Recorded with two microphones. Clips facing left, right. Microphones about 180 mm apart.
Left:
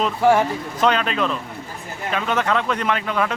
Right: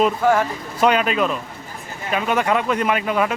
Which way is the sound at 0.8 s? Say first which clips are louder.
Right 3 dB; 10° right (ahead or behind).